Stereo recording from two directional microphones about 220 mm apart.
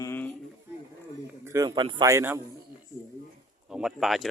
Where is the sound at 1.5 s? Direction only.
15° right (ahead or behind).